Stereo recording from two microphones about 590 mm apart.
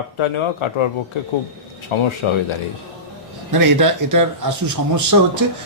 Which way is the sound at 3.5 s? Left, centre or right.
Right.